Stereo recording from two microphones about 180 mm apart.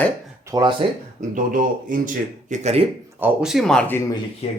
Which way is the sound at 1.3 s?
50° right (ahead or behind).